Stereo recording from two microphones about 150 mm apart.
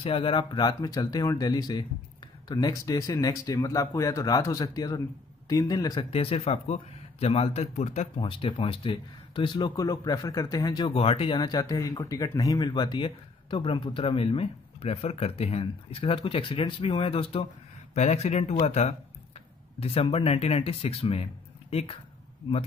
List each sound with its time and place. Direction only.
0.0 s speech: 35° left (ahead or behind)
10.9 s speech: 40° left (ahead or behind)
17.9 s speech: 50° left (ahead or behind)